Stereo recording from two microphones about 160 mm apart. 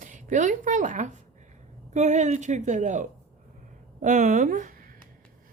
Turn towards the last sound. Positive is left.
turn(degrees=-55)  # may be behind; listen again after turning